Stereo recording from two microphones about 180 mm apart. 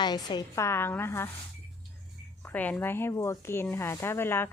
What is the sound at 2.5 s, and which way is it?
Speech, 10° left (ahead or behind).